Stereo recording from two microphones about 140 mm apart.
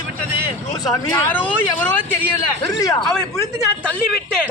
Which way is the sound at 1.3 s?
15° left (ahead or behind).